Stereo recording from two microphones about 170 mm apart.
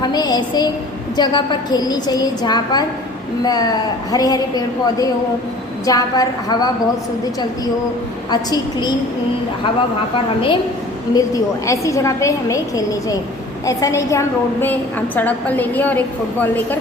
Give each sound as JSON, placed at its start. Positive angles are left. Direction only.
{"t": 0.0, "sound": "a woman's voice", "side_deg": 25}
{"t": 8.3, "sound": "a woman's voice", "side_deg": 25}
{"t": 11.1, "sound": "a woman's voice", "side_deg": 20}